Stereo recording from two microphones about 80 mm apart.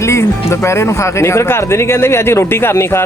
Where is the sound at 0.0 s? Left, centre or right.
Left.